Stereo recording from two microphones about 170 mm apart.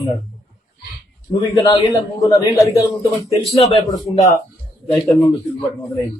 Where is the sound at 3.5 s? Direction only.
40° left (ahead or behind).